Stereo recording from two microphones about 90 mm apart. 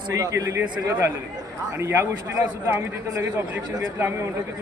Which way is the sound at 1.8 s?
30° right (ahead or behind).